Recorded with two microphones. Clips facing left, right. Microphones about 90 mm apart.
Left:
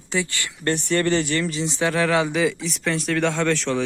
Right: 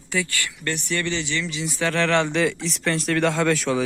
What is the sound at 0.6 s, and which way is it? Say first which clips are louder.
Speech: left 6 dB; 35° left (ahead or behind).